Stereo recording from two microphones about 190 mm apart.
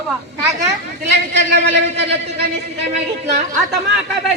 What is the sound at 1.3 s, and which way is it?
A woman's voice, 65° right (ahead or behind).